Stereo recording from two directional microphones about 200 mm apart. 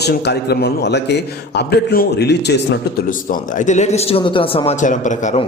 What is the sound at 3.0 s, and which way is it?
Speech, 40° left (ahead or behind).